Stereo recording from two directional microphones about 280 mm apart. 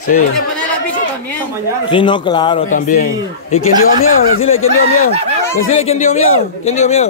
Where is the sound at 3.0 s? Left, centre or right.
Left.